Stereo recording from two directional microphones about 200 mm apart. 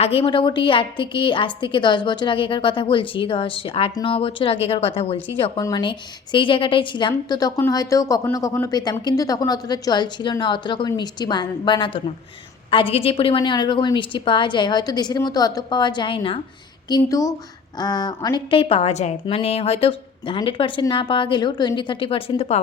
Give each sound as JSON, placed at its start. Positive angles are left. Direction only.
{"t": 0.0, "sound": "a woman's voice", "side_deg": 30}